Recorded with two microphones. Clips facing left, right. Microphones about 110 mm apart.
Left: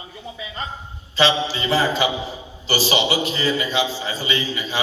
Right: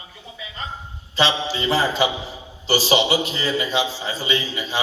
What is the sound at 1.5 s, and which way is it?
A man's voice, 25° right (ahead or behind).